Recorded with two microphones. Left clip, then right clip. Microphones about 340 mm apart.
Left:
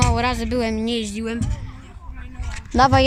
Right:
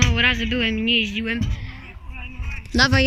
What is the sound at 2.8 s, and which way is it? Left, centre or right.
Speech, centre.